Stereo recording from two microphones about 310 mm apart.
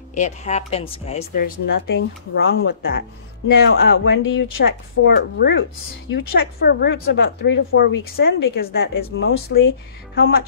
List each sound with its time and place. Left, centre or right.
0.1 s speech: left